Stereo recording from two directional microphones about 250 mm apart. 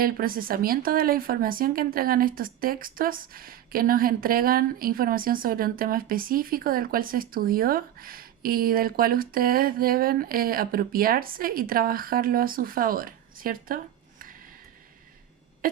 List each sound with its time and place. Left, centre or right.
0.0 s speech: right